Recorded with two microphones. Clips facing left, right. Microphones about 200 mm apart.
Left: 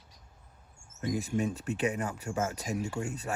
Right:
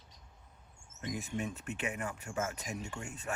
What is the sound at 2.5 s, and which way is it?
Speech, 90° left.